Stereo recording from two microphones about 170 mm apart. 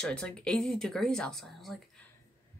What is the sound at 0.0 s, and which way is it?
Speech, 5° left (ahead or behind).